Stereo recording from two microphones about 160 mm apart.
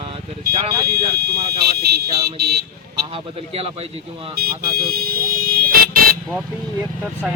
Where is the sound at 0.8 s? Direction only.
80° right.